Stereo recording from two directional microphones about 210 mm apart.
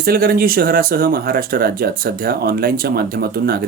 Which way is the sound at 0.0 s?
45° right (ahead or behind).